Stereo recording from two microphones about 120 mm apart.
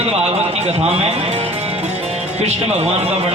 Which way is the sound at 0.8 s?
55° right (ahead or behind).